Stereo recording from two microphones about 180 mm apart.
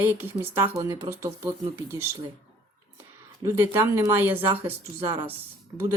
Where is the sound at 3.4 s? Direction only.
15° right (ahead or behind).